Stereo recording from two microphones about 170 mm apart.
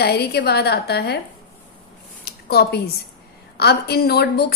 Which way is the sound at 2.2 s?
70° left (ahead or behind).